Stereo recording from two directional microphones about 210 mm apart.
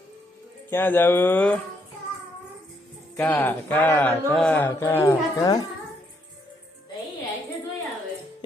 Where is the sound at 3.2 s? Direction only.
10° left (ahead or behind).